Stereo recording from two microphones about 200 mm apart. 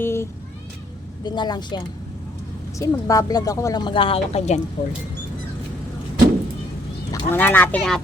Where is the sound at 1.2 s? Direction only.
20° left (ahead or behind).